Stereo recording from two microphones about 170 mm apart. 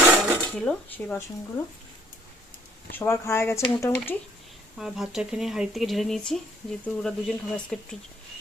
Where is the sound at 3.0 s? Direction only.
15° left (ahead or behind).